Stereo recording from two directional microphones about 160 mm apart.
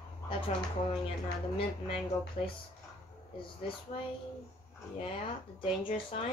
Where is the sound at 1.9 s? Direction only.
35° left (ahead or behind).